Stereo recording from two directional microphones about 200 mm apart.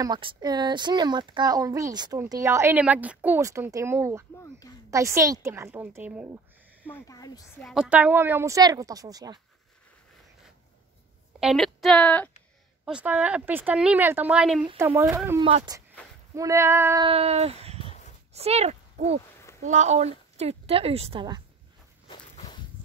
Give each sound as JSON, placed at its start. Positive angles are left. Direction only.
{"t": 0.0, "sound": "a child's voice", "side_deg": -20}
{"t": 6.9, "sound": "speech", "side_deg": 20}
{"t": 7.6, "sound": "speech", "side_deg": -5}
{"t": 11.3, "sound": "a woman's voice", "side_deg": 0}
{"t": 12.8, "sound": "speech", "side_deg": -5}
{"t": 15.4, "sound": "a child's voice", "side_deg": -25}
{"t": 17.0, "sound": "a child's voice", "side_deg": -30}
{"t": 17.8, "sound": "a sound", "side_deg": 35}
{"t": 18.3, "sound": "a sound", "side_deg": -30}
{"t": 19.6, "sound": "a woman's voice", "side_deg": -35}
{"t": 22.0, "sound": "walk", "side_deg": 25}